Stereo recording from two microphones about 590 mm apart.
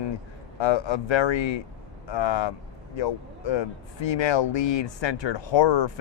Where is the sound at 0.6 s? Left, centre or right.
Left.